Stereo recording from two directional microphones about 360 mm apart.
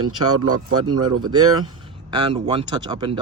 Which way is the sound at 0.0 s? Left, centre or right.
Right.